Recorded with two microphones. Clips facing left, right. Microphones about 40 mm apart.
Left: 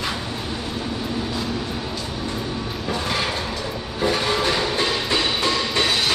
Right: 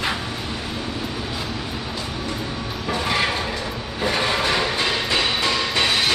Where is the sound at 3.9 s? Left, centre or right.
Centre.